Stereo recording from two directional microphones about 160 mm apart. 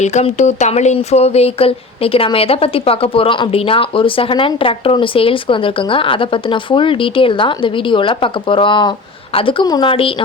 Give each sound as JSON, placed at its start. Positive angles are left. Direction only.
{"t": 0.0, "sound": "speech", "side_deg": 45}